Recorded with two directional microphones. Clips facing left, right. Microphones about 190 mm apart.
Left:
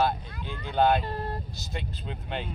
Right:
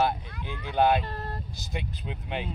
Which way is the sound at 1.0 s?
15° left (ahead or behind).